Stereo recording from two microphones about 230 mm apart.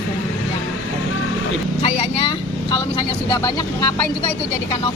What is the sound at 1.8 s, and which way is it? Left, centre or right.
Speech, left.